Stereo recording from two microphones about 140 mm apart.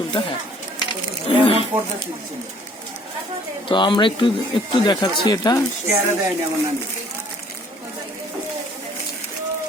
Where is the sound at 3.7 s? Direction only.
35° left (ahead or behind).